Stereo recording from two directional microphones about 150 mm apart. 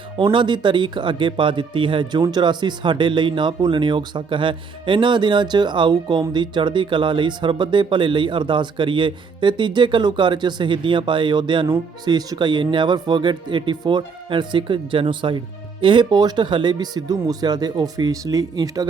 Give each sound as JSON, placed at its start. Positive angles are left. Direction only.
{"t": 0.2, "sound": "a man's voice", "side_deg": -30}